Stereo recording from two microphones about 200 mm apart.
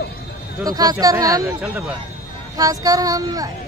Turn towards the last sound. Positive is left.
turn(degrees=-20)  # may be behind; listen again after turning